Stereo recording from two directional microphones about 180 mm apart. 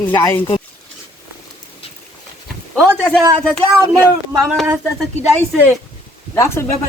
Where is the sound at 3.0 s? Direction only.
5° left (ahead or behind).